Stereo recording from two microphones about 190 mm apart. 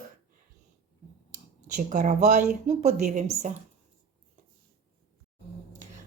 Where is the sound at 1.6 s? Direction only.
40° right (ahead or behind).